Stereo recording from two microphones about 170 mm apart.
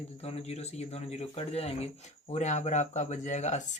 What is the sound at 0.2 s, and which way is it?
Speech, 40° left (ahead or behind).